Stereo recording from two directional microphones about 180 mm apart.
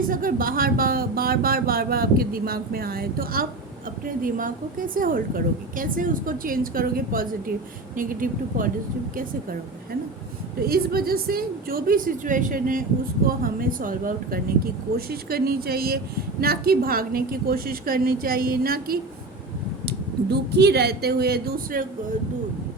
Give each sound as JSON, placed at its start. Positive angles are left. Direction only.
{"t": 0.1, "sound": "a woman's voice", "side_deg": -50}
{"t": 10.6, "sound": "a woman's voice", "side_deg": -55}
{"t": 20.3, "sound": "speech", "side_deg": -65}